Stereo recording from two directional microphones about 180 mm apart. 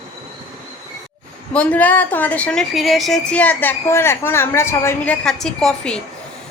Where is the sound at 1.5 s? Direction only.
10° left (ahead or behind).